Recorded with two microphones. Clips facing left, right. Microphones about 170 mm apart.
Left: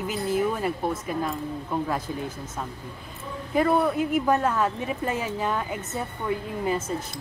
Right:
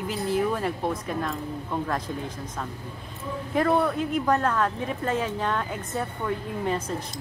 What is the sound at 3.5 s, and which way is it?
Speech, 5° left (ahead or behind).